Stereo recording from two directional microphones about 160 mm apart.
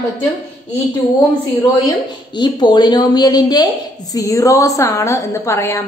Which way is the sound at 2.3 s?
30° left (ahead or behind).